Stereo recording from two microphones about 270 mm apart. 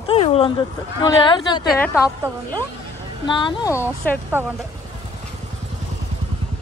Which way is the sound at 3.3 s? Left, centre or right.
Centre.